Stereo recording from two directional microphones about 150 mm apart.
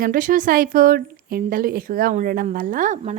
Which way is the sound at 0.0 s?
65° right (ahead or behind).